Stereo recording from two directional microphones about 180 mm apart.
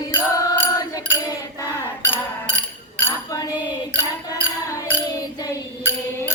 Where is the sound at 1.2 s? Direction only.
20° left (ahead or behind).